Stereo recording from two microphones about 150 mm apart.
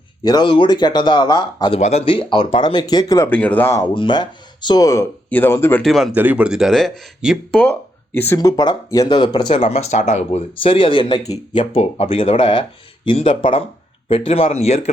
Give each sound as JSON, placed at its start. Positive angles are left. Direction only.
{"t": 0.3, "sound": "speech", "side_deg": 30}
{"t": 1.8, "sound": "speech", "side_deg": 45}
{"t": 3.2, "sound": "speech", "side_deg": 10}
{"t": 3.9, "sound": "speech", "side_deg": 30}
{"t": 5.8, "sound": "speech", "side_deg": 0}
{"t": 6.1, "sound": "speech", "side_deg": -10}
{"t": 7.6, "sound": "speech", "side_deg": 15}
{"t": 8.4, "sound": "speech", "side_deg": 25}
{"t": 9.5, "sound": "speech", "side_deg": 45}
{"t": 11.2, "sound": "speech", "side_deg": 25}
{"t": 11.7, "sound": "speech", "side_deg": 40}